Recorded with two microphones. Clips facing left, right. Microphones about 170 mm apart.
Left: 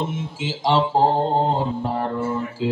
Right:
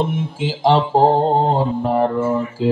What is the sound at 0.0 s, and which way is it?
Mantra, 55° right (ahead or behind).